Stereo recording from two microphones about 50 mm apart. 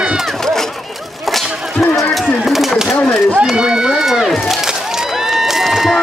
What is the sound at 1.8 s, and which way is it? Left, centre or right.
Run, centre.